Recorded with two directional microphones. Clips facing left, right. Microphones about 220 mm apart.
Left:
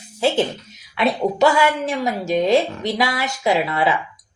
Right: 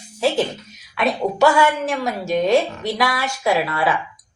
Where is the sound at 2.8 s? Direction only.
20° left (ahead or behind).